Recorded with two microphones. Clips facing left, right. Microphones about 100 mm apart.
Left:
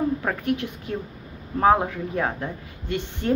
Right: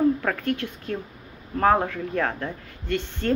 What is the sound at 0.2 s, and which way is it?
A woman's voice, 20° left (ahead or behind).